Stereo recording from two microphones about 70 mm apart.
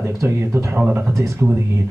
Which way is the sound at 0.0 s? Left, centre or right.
Right.